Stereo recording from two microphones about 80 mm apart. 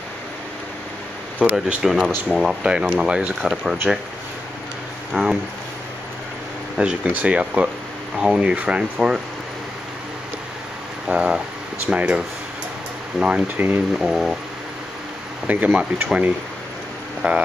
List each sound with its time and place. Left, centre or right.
1.4 s speech: centre
1.9 s speech: centre
2.6 s speech: centre
5.1 s speech: centre
6.8 s speech: centre
11.1 s a sound: centre
11.9 s speech: centre
13.2 s speech: centre
13.9 s speech: centre
15.4 s speech: centre